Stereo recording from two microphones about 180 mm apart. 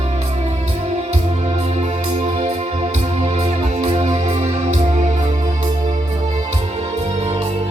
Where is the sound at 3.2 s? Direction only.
40° right (ahead or behind).